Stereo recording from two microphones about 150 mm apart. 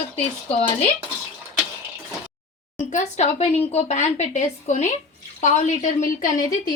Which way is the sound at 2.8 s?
55° left (ahead or behind).